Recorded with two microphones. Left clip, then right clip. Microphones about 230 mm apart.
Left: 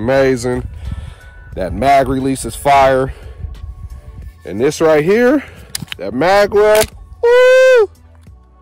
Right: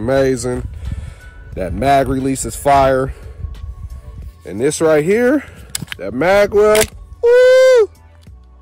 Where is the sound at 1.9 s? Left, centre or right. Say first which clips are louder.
Left 2 dB; centre.